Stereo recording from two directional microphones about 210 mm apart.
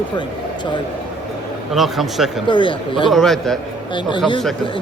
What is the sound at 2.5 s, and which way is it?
Speech, 25° left (ahead or behind).